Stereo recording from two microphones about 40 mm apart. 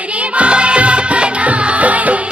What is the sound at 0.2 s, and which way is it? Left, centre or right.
Music, right.